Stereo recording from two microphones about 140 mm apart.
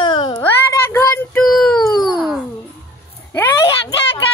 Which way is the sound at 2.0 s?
Centre (ahead or behind).